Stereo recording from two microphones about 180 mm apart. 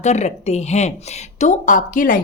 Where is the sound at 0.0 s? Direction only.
40° left (ahead or behind).